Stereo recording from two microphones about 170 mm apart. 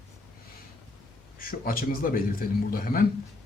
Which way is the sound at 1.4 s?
60° left (ahead or behind).